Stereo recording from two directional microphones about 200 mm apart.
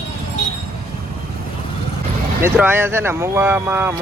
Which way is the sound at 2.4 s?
10° right (ahead or behind).